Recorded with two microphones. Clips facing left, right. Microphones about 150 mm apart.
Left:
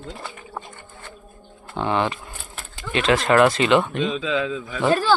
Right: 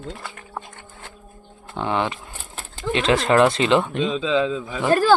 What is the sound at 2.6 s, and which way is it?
Speech, 25° right (ahead or behind).